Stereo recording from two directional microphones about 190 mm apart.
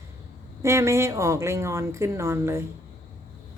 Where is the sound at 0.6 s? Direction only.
15° right (ahead or behind).